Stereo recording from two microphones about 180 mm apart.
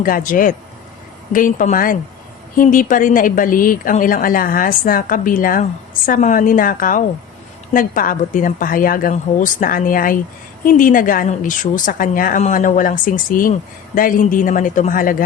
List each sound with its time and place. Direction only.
0.0 s a woman's voice: 50° left (ahead or behind)